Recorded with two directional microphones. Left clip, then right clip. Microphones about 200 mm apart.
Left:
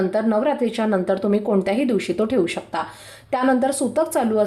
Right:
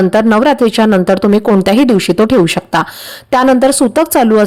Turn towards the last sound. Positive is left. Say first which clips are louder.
# right 10 dB
turn(degrees=-50)  # may be behind; listen again after turning